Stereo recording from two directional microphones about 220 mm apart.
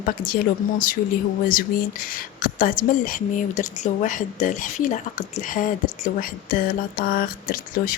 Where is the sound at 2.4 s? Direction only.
40° left (ahead or behind).